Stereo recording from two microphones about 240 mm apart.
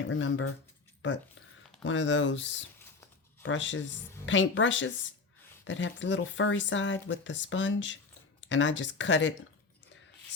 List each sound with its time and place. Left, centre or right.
0.0 s speech: left
1.8 s speech: left